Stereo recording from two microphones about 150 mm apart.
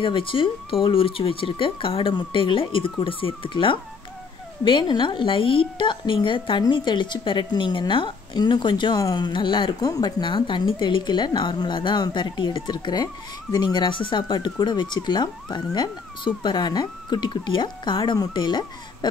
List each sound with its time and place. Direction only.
0.0 s a woman's voice: 35° left (ahead or behind)